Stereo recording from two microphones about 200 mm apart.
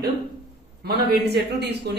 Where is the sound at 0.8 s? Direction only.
55° right (ahead or behind).